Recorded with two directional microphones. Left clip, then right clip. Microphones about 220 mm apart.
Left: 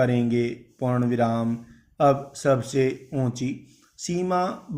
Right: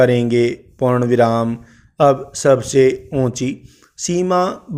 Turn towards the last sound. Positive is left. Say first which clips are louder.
# right 8 dB
turn(degrees=-45)  # may be behind; listen again after turning